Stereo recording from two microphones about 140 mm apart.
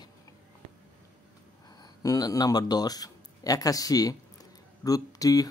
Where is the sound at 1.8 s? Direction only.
25° left (ahead or behind).